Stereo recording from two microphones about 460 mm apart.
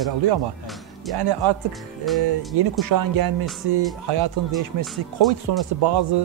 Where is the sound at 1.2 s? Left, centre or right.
Right.